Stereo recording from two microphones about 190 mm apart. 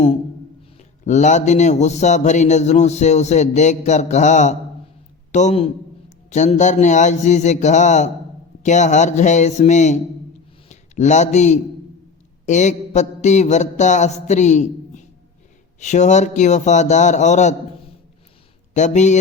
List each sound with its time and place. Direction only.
0.8 s a man's voice: 40° left (ahead or behind)
18.7 s a man's voice: 40° left (ahead or behind)